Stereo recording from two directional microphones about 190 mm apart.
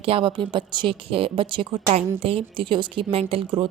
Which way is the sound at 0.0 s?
30° right (ahead or behind).